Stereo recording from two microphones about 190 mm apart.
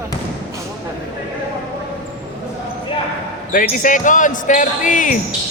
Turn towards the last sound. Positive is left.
turn(degrees=45)  # may be behind; listen again after turning